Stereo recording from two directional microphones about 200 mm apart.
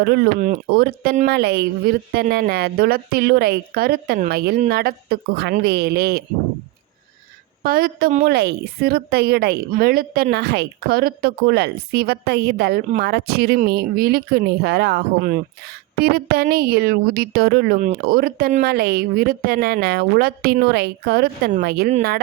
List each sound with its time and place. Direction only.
0.0 s a woman's voice: 55° right (ahead or behind)
7.6 s a woman's voice: 45° right (ahead or behind)